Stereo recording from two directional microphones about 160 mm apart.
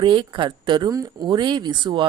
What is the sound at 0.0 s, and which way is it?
Speech, 30° right (ahead or behind).